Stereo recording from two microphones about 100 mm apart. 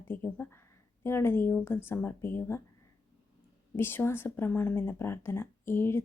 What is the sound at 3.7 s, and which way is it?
Speech, 20° left (ahead or behind).